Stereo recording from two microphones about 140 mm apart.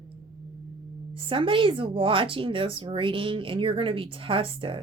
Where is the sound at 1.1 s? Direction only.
40° right (ahead or behind).